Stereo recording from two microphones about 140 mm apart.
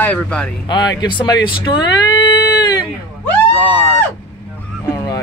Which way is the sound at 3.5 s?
10° left (ahead or behind).